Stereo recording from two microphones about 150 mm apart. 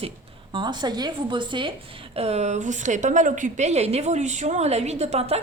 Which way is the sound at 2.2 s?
45° right (ahead or behind).